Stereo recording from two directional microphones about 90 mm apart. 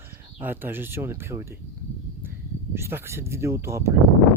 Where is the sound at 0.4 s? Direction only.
25° right (ahead or behind).